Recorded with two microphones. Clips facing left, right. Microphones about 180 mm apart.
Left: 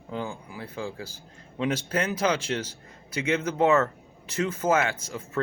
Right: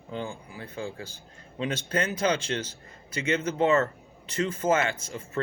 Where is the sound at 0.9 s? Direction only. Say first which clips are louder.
Left 1 dB; 10° left (ahead or behind).